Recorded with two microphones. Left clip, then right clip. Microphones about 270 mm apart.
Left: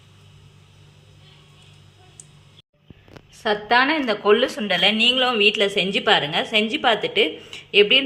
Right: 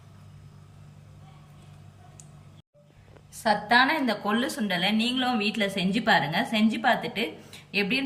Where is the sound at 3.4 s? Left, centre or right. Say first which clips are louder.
Left 3 dB; centre.